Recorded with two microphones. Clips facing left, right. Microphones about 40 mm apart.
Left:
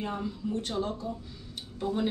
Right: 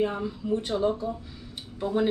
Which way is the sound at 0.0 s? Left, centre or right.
Centre.